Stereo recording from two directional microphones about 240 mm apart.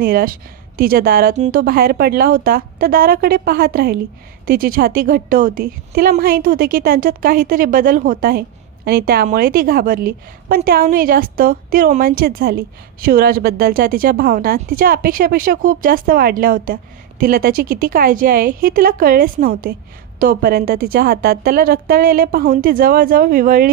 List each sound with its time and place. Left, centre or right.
0.0 s a woman's voice: right